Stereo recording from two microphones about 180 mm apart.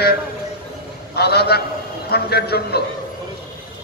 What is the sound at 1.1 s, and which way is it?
A man's voice, 65° left (ahead or behind).